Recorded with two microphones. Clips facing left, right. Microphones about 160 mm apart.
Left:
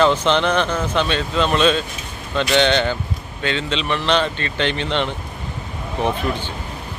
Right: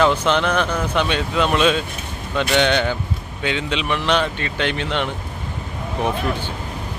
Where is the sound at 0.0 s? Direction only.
10° right (ahead or behind).